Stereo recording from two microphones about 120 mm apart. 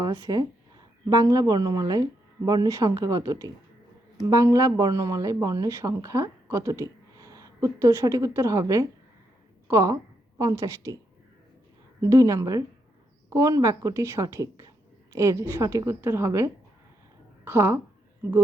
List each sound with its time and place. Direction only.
0.0 s a woman's voice: 30° right (ahead or behind)
11.9 s speech: 25° right (ahead or behind)